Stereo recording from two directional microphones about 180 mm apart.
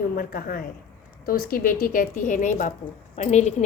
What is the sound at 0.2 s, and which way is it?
A woman's voice, 55° left (ahead or behind).